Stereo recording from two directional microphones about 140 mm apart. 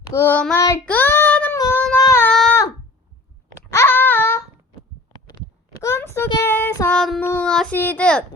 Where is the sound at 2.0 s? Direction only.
25° left (ahead or behind).